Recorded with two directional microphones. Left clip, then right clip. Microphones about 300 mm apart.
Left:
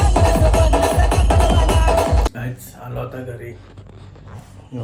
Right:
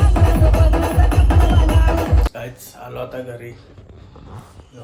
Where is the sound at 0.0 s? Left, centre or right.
Left.